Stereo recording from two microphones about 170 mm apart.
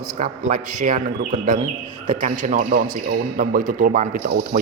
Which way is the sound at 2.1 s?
50° right (ahead or behind).